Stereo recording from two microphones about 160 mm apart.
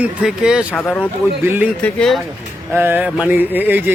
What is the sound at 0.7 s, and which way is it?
Speech, 10° left (ahead or behind).